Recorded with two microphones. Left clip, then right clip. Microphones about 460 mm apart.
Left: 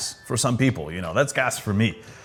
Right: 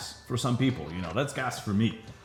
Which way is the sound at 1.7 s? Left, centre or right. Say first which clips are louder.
Left 5 dB; left.